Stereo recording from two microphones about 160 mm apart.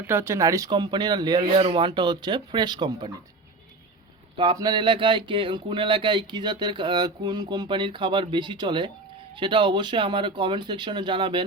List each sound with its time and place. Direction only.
0.1 s speech: 15° right (ahead or behind)
4.4 s speech: 25° right (ahead or behind)